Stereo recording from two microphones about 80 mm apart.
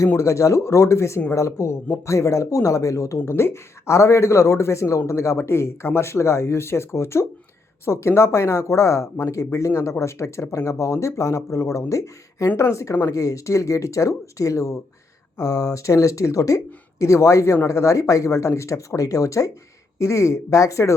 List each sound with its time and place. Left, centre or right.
0.2 s speech: left